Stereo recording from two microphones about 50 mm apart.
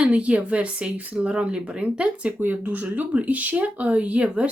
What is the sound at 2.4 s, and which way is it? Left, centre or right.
Speech, right.